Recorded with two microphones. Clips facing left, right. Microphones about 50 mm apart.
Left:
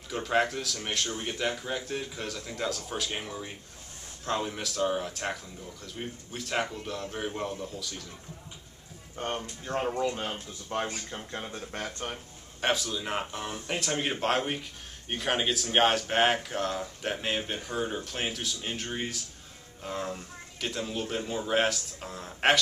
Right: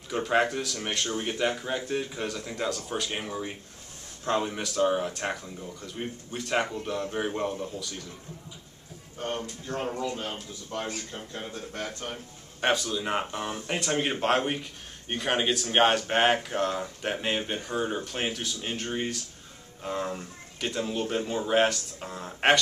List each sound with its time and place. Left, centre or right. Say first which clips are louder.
0.1 s speech: right 2 dB; centre
9.9 s a man's voice: left 2 dB; left
11.5 s a man's voice: right 1 dB; left
12.5 s speech: right 3 dB; centre